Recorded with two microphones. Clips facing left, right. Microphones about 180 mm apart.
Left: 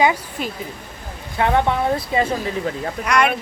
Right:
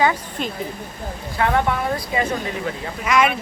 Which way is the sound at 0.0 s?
10° left (ahead or behind).